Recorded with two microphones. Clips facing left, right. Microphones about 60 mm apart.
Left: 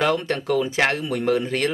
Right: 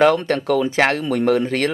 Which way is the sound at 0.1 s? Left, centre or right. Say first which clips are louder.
Right 4 dB; right.